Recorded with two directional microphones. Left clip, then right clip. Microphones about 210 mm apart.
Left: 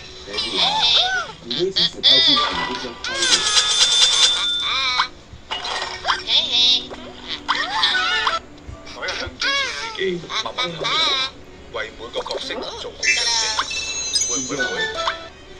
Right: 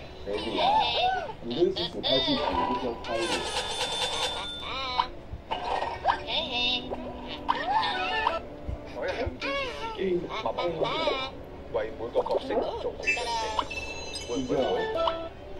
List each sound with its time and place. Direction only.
0.6 s a sound: centre (ahead or behind)
7.2 s music: centre (ahead or behind)
9.0 s a sound: 5° left (ahead or behind)
10.5 s music: 5° left (ahead or behind)
12.1 s speech: 30° left (ahead or behind)
12.4 s music: centre (ahead or behind)
14.5 s speech: centre (ahead or behind)